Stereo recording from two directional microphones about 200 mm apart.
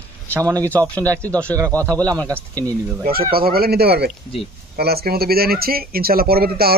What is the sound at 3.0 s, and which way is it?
Speech, 50° right (ahead or behind).